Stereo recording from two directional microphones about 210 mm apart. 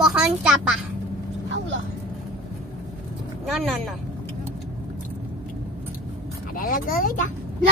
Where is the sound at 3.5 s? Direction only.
Centre (ahead or behind).